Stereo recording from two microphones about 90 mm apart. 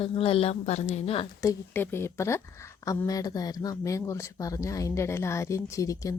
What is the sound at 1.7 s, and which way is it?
A woman's voice, 25° left (ahead or behind).